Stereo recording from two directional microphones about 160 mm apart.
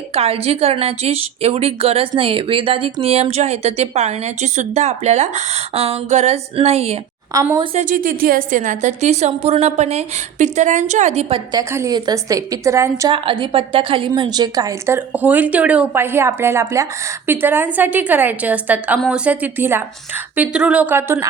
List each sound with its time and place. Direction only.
0.1 s a woman's voice: 40° right (ahead or behind)
7.9 s a woman's voice: 60° right (ahead or behind); by 11.3 s 40° right (ahead or behind)
11.5 s a woman's voice: 20° right (ahead or behind)
13.1 s a woman's voice: 30° right (ahead or behind); by 21.2 s 15° right (ahead or behind)